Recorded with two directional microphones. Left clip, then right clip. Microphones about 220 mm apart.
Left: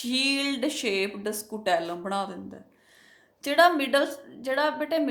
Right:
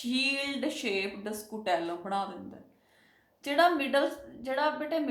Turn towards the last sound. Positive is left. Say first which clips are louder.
# left 4 dB
turn(degrees=45)  # may be behind; listen again after turning